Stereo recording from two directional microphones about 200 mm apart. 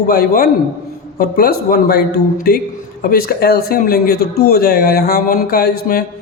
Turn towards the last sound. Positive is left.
turn(degrees=50)  # may be behind; listen again after turning